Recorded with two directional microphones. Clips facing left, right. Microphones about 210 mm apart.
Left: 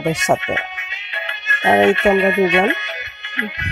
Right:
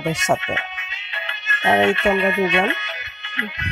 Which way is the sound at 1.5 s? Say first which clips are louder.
Left 4 dB; 15° left (ahead or behind).